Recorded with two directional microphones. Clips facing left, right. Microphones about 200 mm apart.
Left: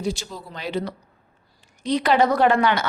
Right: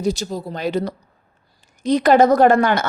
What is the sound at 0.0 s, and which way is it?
Speech, 40° right (ahead or behind).